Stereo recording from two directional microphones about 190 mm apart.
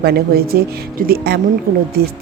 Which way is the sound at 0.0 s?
55° right (ahead or behind).